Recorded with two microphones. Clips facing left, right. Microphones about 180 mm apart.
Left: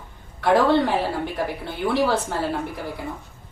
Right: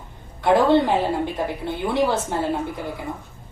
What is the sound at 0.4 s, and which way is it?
A woman's voice, 20° right (ahead or behind).